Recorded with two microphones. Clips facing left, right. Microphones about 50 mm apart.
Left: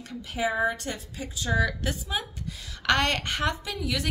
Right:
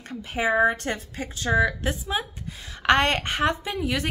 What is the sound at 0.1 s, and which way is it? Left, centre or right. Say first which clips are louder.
A woman's voice: right 4 dB; right.